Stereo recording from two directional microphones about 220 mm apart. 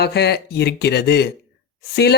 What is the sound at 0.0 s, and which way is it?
Speech, 50° left (ahead or behind).